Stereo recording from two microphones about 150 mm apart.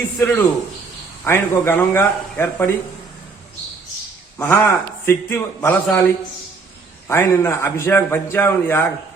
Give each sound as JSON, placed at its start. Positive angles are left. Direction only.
{"t": 0.2, "sound": "a man's voice", "side_deg": 10}
{"t": 4.4, "sound": "a man's voice", "side_deg": 15}
{"t": 7.1, "sound": "a man's voice", "side_deg": 15}